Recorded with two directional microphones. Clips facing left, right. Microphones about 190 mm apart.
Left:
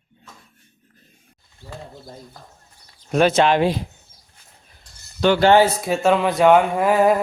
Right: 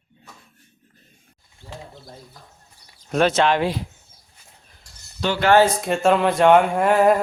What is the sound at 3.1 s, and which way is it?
Speech, 5° left (ahead or behind).